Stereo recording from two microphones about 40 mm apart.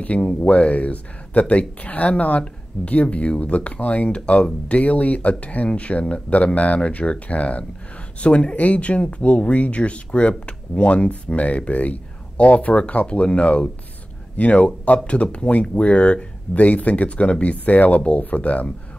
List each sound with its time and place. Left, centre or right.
0.0 s speech: left